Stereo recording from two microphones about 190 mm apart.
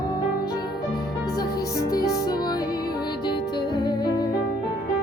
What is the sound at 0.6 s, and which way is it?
Music, 20° left (ahead or behind).